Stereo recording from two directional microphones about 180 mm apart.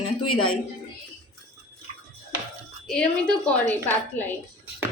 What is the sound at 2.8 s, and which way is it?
A woman's voice, 5° left (ahead or behind).